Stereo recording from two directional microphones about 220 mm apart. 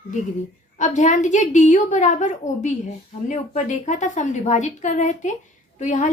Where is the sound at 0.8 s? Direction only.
35° left (ahead or behind).